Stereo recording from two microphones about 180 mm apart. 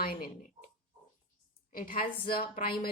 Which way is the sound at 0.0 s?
55° left (ahead or behind).